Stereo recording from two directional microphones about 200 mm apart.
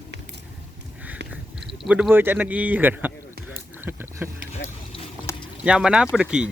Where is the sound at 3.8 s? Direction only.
10° right (ahead or behind).